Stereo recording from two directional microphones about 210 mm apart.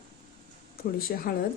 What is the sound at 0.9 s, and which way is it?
Speech, 45° left (ahead or behind).